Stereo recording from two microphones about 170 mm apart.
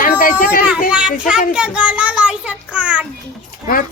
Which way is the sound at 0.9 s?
5° right (ahead or behind).